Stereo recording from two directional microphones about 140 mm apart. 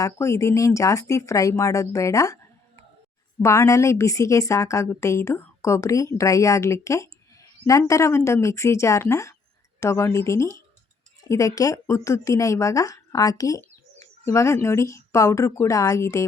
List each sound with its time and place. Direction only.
0.0 s a woman's voice: 20° left (ahead or behind)
3.4 s a woman's voice: 20° left (ahead or behind)